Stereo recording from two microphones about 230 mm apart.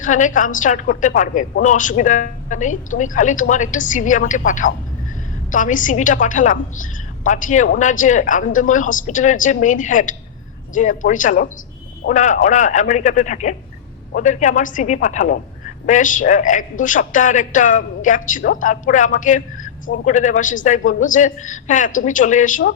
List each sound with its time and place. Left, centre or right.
0.0 s a woman's voice: left